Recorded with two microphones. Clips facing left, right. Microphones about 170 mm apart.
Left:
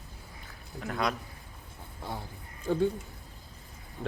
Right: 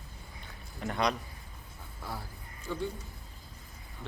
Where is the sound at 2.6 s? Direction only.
50° left (ahead or behind).